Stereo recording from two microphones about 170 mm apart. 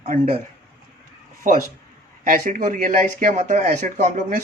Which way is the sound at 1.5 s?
50° right (ahead or behind).